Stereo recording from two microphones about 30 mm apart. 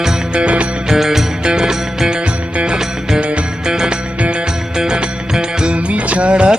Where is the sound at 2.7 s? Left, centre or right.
Right.